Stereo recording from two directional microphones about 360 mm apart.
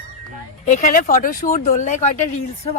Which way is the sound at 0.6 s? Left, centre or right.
Left.